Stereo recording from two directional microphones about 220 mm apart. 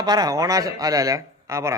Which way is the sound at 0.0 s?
15° right (ahead or behind).